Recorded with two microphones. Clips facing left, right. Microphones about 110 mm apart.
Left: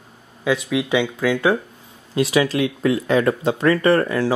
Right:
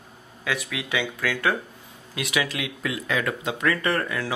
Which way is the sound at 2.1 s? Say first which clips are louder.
Left 10 dB; 30° left (ahead or behind).